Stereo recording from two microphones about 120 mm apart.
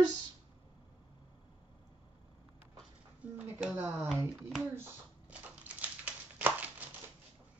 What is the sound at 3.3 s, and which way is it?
Speech, 10° right (ahead or behind).